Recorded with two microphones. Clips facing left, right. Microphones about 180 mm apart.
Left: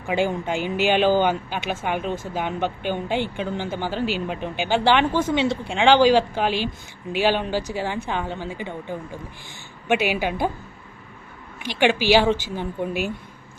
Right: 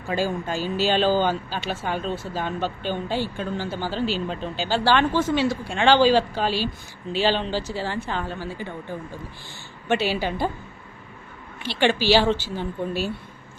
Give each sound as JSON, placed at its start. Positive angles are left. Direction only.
{"t": 0.1, "sound": "speech", "side_deg": 20}
{"t": 11.6, "sound": "speech", "side_deg": 15}